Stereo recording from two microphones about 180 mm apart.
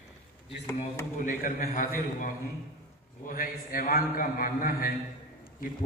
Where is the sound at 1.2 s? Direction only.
50° left (ahead or behind).